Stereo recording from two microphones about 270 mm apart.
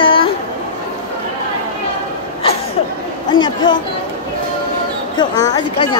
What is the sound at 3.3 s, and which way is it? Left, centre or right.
Speech, centre.